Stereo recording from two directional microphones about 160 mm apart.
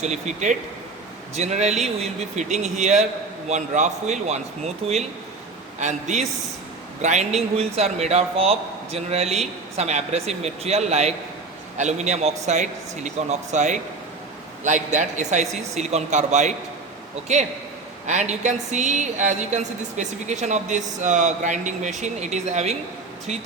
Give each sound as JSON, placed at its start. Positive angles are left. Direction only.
{"t": 0.0, "sound": "a woman's voice", "side_deg": -45}